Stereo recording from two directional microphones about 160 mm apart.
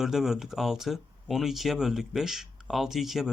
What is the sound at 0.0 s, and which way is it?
Speech, 5° right (ahead or behind).